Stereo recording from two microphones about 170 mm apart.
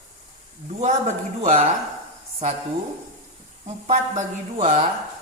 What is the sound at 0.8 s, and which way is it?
Speech, 40° right (ahead or behind).